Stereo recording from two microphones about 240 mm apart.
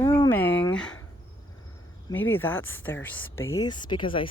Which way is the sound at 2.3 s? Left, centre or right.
Centre.